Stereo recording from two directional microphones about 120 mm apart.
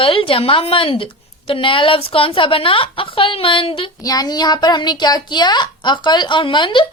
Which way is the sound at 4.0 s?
30° left (ahead or behind).